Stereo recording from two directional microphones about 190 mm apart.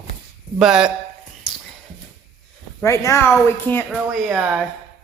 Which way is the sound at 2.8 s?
15° left (ahead or behind).